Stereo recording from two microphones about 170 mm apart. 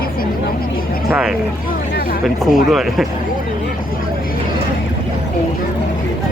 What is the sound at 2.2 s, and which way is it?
Speech, centre (ahead or behind).